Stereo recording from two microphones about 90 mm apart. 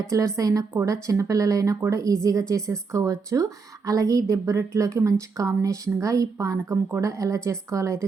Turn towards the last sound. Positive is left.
turn(degrees=-35)  # may be behind; listen again after turning